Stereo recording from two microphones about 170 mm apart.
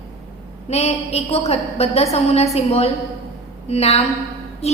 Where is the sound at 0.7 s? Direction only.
40° left (ahead or behind).